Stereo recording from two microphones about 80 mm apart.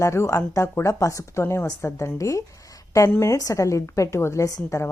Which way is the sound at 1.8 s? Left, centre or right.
Left.